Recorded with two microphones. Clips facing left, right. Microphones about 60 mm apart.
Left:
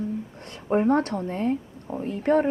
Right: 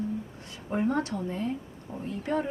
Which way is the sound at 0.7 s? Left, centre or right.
Left.